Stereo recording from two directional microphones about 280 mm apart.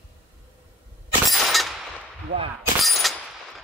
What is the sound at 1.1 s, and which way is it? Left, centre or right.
Breaking, centre.